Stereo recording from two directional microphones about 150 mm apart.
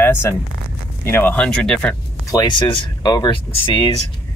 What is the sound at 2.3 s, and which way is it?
Speech, 30° left (ahead or behind).